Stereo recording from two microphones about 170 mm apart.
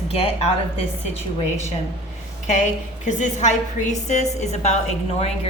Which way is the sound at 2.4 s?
45° left (ahead or behind).